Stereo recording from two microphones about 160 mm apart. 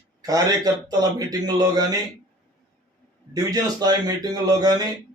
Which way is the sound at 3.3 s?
25° right (ahead or behind).